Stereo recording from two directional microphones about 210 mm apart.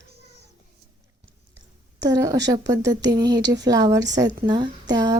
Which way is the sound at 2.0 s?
15° right (ahead or behind).